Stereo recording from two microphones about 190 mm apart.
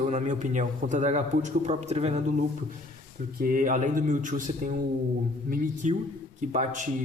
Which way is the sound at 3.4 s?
50° right (ahead or behind).